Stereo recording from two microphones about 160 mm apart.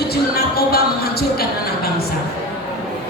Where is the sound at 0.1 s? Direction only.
75° left (ahead or behind).